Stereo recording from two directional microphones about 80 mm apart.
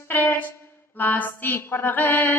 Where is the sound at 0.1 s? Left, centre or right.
Left.